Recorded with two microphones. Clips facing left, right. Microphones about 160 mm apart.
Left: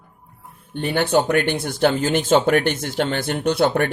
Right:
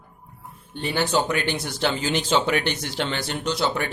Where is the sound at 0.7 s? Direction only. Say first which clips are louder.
Left 5 dB; 55° left (ahead or behind).